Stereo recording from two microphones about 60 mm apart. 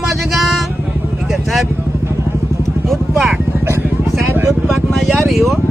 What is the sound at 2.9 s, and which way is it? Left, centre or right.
Speech, centre.